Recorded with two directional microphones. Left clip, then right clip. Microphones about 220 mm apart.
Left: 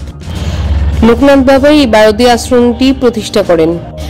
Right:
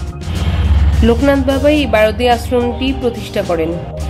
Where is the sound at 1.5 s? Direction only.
30° left (ahead or behind).